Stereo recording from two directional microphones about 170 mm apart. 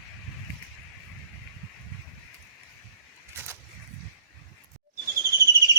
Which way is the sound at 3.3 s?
15° right (ahead or behind).